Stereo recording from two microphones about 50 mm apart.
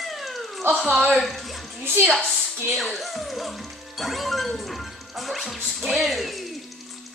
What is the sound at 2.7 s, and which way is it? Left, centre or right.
Speech, centre.